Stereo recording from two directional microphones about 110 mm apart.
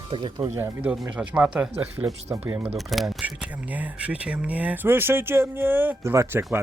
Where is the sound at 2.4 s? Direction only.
15° right (ahead or behind).